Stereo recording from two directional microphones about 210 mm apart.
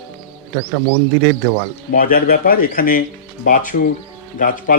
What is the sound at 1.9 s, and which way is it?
A man's voice, 45° left (ahead or behind).